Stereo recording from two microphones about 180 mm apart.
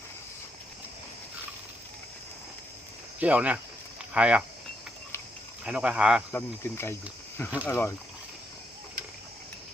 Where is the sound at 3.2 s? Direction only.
10° right (ahead or behind).